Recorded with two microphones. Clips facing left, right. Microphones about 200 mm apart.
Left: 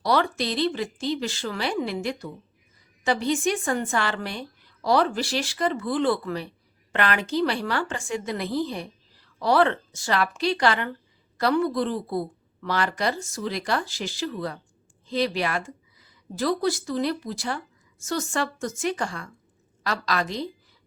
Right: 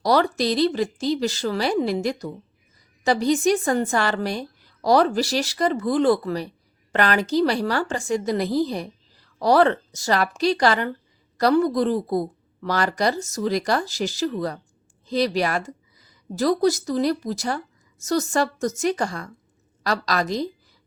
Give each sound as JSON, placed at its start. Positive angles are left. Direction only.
{"t": 0.0, "sound": "a woman's voice", "side_deg": -40}